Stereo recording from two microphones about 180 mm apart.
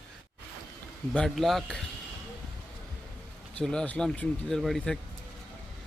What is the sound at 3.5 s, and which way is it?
Speech, 5° left (ahead or behind).